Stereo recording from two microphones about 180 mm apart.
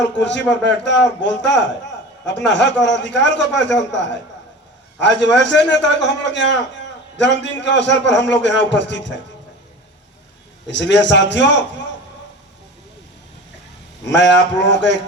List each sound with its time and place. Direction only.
0.2 s a man's voice: 80° left
10.7 s a man's voice: 80° left
14.0 s a man's voice: 80° left